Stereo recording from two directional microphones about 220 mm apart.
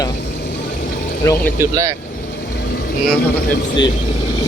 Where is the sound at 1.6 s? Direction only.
15° right (ahead or behind).